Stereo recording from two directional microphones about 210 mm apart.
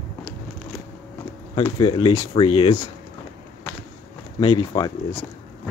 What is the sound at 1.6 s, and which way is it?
Speech, 20° left (ahead or behind).